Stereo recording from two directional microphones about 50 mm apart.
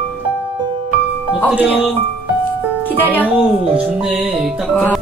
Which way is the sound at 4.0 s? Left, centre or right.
Centre.